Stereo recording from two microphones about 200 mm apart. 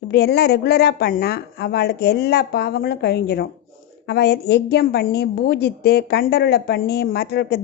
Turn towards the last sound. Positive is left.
turn(degrees=55)  # may be behind; listen again after turning